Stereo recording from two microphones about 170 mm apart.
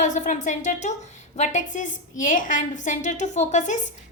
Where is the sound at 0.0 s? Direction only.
45° left (ahead or behind).